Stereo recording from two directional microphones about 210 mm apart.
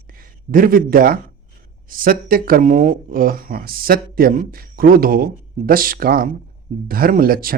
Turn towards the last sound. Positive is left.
turn(degrees=-45)  # may be behind; listen again after turning